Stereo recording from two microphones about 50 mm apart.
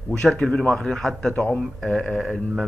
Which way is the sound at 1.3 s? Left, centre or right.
Centre.